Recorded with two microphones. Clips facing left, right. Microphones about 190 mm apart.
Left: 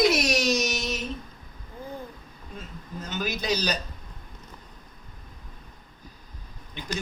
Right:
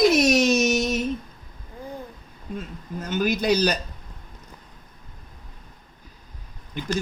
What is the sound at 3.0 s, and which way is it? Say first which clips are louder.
Speech: right 7 dB; 55° right (ahead or behind).